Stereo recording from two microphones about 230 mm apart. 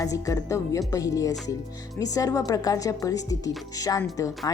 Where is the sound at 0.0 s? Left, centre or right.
Centre.